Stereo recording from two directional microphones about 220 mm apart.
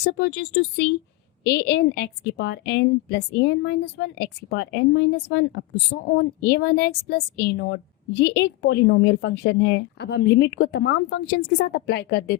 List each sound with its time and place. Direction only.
0.0 s a woman's voice: 50° left (ahead or behind)